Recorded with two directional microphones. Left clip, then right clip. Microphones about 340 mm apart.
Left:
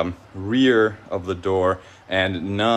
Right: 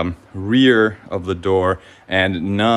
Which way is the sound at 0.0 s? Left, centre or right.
Right.